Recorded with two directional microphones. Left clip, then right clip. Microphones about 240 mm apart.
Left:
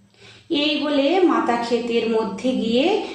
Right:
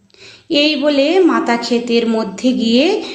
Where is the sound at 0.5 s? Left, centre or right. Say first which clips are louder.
Right 7 dB; right.